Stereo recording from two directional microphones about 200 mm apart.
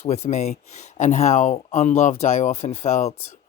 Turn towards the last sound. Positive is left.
turn(degrees=35)  # may be behind; listen again after turning